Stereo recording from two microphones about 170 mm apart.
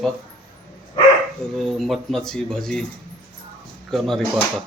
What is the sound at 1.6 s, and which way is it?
A man's voice, centre (ahead or behind).